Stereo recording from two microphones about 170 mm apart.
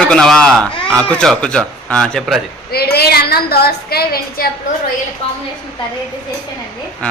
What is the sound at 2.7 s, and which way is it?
A woman's voice, 70° left (ahead or behind).